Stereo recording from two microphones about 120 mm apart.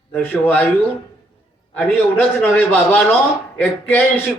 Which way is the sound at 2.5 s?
15° left (ahead or behind).